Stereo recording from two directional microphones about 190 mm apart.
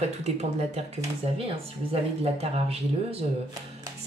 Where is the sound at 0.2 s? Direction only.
35° right (ahead or behind).